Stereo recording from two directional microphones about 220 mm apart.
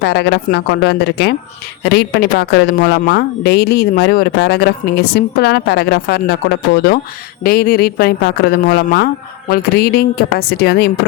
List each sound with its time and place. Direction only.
0.0 s speech: 50° left (ahead or behind)